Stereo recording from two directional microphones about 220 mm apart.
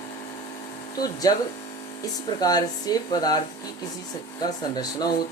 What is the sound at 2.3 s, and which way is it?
Speech, 15° left (ahead or behind).